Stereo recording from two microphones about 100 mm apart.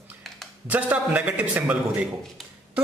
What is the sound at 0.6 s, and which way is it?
Speech, 15° right (ahead or behind).